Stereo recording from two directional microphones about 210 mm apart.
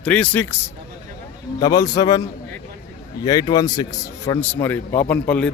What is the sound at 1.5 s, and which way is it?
Speech, 20° left (ahead or behind).